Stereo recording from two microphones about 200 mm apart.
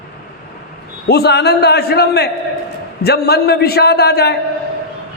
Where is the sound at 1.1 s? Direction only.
55° left (ahead or behind).